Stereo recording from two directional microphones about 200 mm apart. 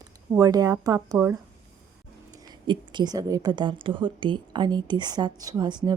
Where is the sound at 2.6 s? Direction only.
20° right (ahead or behind).